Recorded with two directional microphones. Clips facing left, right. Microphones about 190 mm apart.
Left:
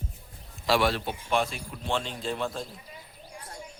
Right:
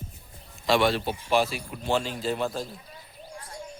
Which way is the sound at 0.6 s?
5° left (ahead or behind).